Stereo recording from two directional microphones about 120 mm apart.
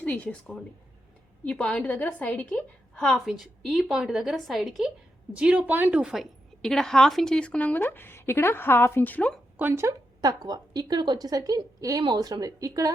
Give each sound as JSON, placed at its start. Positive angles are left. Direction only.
{"t": 0.0, "sound": "a woman's voice", "side_deg": 10}
{"t": 6.6, "sound": "a woman's voice", "side_deg": 5}
{"t": 9.6, "sound": "speech", "side_deg": -20}
{"t": 10.2, "sound": "a woman's voice", "side_deg": -35}